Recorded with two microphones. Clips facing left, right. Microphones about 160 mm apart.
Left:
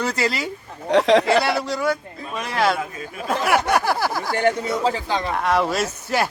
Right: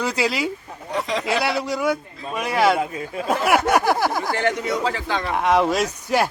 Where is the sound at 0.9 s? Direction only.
75° left (ahead or behind).